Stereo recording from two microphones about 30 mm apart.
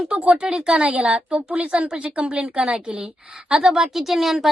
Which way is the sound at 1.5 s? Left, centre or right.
Right.